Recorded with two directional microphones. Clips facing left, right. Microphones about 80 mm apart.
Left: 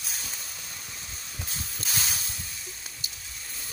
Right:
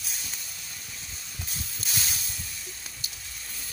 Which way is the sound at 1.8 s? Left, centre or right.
Left.